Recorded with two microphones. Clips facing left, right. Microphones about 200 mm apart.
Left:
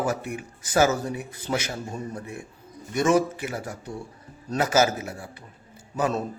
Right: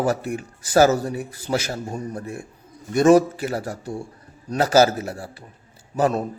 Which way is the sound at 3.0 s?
35° right (ahead or behind).